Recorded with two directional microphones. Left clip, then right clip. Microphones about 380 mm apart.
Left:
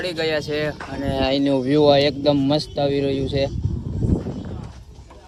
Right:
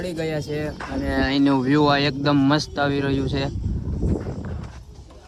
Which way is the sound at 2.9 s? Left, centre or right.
Centre.